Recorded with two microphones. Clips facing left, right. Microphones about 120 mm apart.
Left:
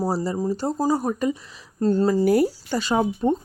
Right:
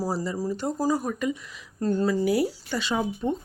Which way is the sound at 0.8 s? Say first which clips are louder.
Left 4 dB; 35° left (ahead or behind).